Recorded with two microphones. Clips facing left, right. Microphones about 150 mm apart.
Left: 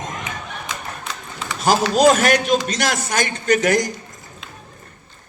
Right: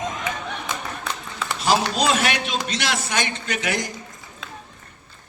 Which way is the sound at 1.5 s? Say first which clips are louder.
Left 4 dB; 45° left (ahead or behind).